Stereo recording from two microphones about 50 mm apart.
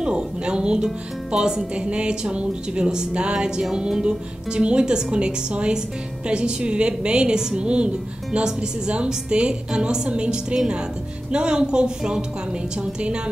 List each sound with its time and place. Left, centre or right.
0.0 s a woman's voice: centre